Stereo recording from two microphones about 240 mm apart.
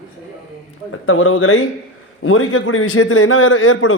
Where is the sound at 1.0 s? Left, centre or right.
Left.